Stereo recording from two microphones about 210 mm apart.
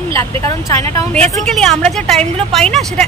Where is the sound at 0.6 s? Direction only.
10° left (ahead or behind).